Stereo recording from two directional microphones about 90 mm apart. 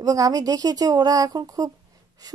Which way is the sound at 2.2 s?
45° right (ahead or behind).